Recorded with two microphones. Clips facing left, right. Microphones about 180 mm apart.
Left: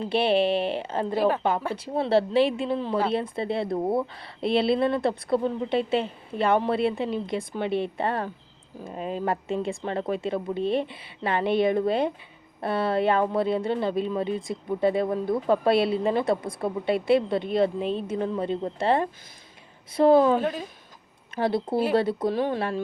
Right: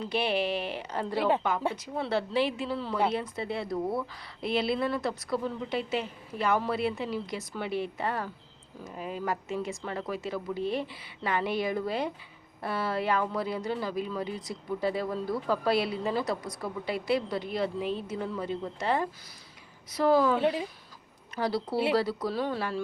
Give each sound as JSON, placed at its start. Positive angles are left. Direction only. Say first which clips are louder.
{"t": 0.0, "sound": "speech", "louder": "left 7 dB", "side_deg": 30}
{"t": 20.4, "sound": "speech", "louder": "right 1 dB", "side_deg": -20}
{"t": 21.3, "sound": "speech", "louder": "left 5 dB", "side_deg": 20}